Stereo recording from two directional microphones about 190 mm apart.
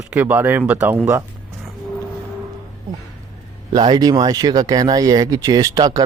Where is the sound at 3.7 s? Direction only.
25° right (ahead or behind).